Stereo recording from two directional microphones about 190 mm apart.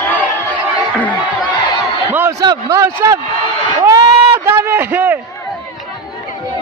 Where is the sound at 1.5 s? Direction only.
25° left (ahead or behind).